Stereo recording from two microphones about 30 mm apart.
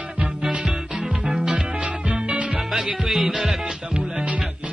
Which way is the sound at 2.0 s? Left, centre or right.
Right.